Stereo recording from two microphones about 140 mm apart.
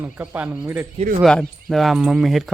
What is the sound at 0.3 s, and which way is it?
Speech, 15° right (ahead or behind).